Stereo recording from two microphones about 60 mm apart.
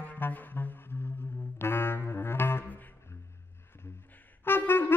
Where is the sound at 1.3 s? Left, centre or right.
Left.